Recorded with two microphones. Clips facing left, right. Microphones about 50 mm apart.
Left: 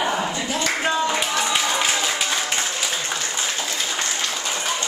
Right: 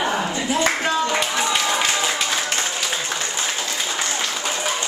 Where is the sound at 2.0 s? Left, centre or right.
Centre.